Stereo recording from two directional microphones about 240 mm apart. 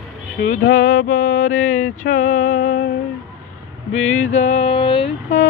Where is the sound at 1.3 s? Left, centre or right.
Left.